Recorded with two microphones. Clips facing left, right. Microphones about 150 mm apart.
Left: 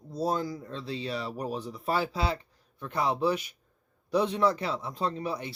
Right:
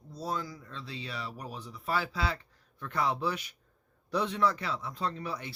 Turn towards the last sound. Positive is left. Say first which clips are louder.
# left 4 dB
turn(degrees=20)  # may be behind; listen again after turning